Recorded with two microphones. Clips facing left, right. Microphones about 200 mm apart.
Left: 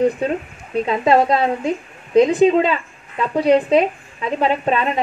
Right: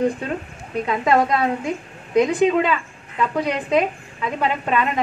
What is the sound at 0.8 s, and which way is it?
A woman's voice, 30° left (ahead or behind).